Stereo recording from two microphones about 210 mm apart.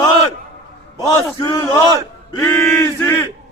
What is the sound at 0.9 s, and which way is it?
Speech, 15° left (ahead or behind).